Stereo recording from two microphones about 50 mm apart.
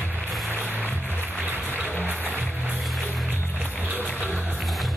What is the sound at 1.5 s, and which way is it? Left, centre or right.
Music, right.